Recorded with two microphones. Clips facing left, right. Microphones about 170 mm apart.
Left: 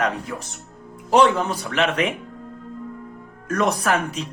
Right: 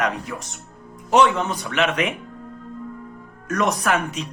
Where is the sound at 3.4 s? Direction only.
30° left (ahead or behind).